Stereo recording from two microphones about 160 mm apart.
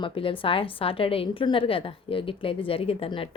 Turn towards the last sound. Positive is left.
turn(degrees=35)  # may be behind; listen again after turning